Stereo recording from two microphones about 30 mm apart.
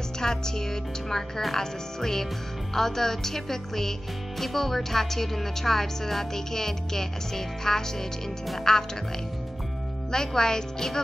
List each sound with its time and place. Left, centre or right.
0.2 s speech: centre
10.1 s speech: centre